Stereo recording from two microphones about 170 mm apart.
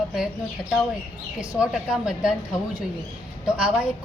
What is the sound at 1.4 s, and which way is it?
Speech, 5° right (ahead or behind).